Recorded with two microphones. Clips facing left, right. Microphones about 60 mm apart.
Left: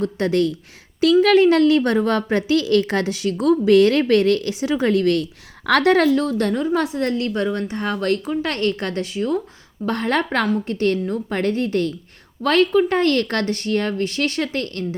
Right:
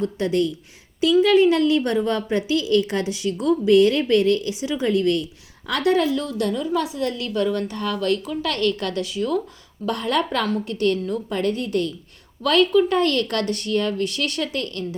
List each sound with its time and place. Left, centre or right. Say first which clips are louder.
0.0 s a woman's voice: left 2 dB; left
5.6 s a woman's voice: left 5 dB; left
6.1 s a woman's voice: left 4 dB; left
7.4 s a woman's voice: left 1 dB; left